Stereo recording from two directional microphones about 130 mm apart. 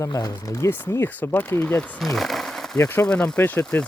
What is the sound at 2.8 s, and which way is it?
Speech, 15° left (ahead or behind).